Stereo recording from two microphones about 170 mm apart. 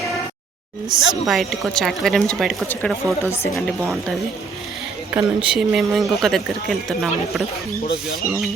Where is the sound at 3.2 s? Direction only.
15° left (ahead or behind).